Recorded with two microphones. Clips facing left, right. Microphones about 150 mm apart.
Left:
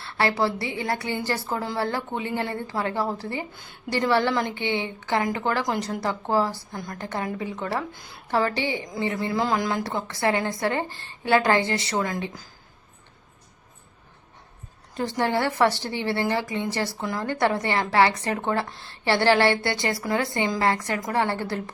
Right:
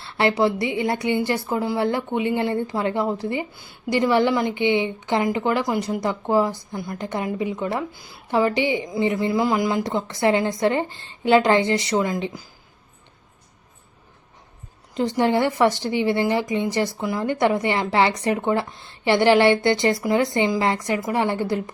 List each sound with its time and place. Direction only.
0.0 s a woman's voice: 20° right (ahead or behind)
3.5 s a woman's voice: 5° right (ahead or behind)
7.9 s a woman's voice: 5° right (ahead or behind)
8.3 s a woman's voice: 15° right (ahead or behind)
14.9 s a woman's voice: 15° right (ahead or behind)